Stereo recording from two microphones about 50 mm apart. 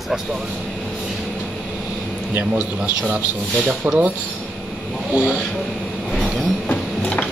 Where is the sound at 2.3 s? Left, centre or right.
Right.